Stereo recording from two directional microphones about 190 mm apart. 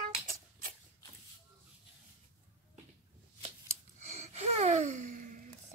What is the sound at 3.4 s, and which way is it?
Gasp, 35° right (ahead or behind).